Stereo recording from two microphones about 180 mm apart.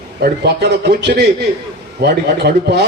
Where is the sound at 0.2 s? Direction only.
65° right (ahead or behind).